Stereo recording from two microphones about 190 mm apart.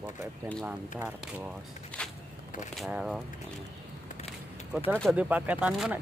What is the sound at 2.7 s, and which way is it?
Speech, centre (ahead or behind).